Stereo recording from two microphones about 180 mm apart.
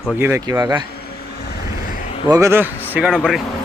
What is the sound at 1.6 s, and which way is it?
Vehicle, 55° left (ahead or behind).